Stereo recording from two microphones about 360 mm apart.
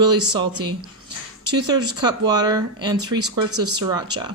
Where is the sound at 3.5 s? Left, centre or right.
Right.